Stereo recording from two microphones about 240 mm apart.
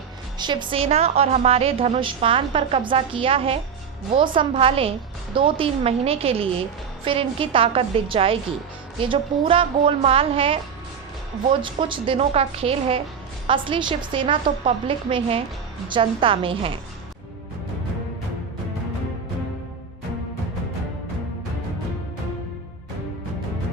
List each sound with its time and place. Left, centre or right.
0.3 s a woman's voice: centre
11.6 s a woman's voice: right